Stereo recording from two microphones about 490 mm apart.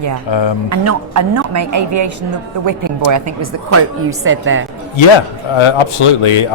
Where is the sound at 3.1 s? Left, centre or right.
Right.